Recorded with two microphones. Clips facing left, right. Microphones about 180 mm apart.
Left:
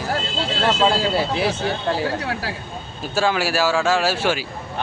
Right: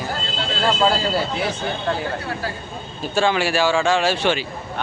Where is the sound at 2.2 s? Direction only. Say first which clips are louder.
Left 1 dB; 80° left.